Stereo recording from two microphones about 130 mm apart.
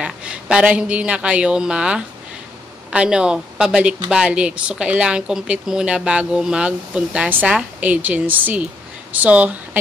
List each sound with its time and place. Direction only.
0.0 s a woman's voice: 10° right (ahead or behind)